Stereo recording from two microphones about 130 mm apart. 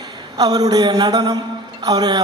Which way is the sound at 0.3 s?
30° right (ahead or behind).